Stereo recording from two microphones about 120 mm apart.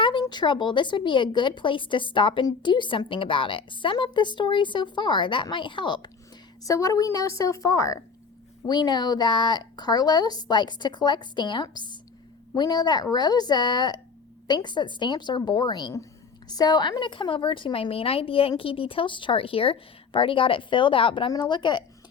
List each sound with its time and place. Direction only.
0.0 s speech: 40° left (ahead or behind)
6.7 s a woman's voice: 30° left (ahead or behind)